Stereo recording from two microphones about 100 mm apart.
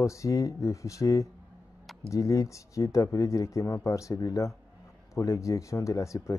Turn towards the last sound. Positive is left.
turn(degrees=30)  # may be behind; listen again after turning